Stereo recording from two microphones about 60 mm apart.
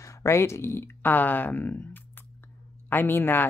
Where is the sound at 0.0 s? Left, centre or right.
Left.